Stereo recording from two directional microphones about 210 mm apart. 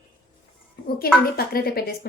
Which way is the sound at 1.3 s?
45° left (ahead or behind).